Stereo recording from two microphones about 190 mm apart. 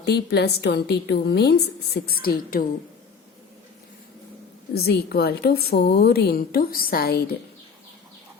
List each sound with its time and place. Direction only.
0.0 s a woman's voice: 60° left (ahead or behind)
4.7 s a woman's voice: 55° left (ahead or behind)